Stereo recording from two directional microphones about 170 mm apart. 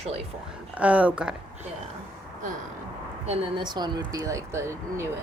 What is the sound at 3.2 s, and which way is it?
Speech, 25° right (ahead or behind).